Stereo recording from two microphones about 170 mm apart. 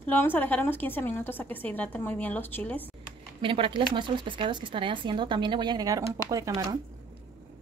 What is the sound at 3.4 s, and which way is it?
Speech, 30° right (ahead or behind).